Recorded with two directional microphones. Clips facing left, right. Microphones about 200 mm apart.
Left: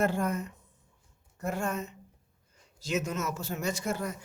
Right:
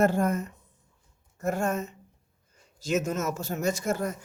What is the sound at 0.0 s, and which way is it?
Speech, 45° right (ahead or behind).